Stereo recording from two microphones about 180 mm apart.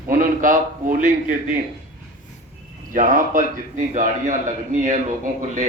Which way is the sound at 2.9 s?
45° right (ahead or behind).